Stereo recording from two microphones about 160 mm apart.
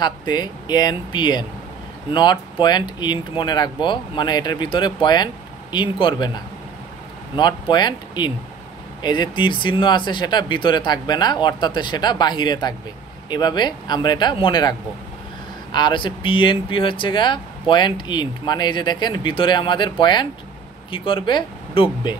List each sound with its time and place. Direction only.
0.0 s speech: 25° left (ahead or behind)